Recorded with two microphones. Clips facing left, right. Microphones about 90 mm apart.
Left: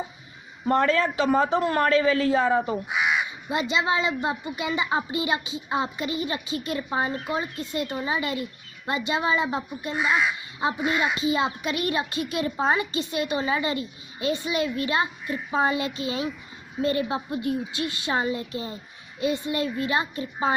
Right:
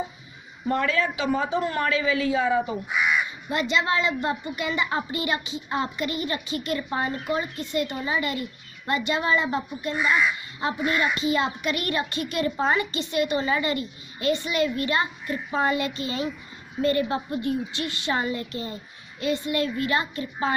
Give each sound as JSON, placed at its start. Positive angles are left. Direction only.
{"t": 0.7, "sound": "a woman's voice", "side_deg": 45}
{"t": 3.5, "sound": "a woman's voice", "side_deg": 15}